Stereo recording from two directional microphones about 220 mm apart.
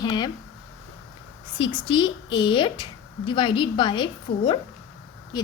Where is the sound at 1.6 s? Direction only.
20° left (ahead or behind).